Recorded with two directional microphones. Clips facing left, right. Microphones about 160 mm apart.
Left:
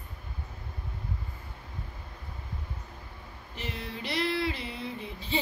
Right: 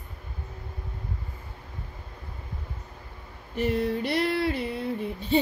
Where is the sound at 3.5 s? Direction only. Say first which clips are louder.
Right 13 dB; 55° right (ahead or behind).